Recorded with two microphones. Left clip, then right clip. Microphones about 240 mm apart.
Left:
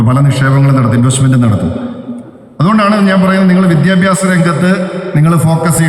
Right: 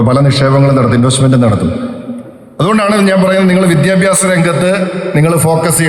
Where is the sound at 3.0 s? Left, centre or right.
Right.